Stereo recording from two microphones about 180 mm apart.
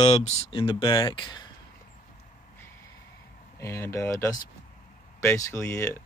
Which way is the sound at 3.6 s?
15° left (ahead or behind).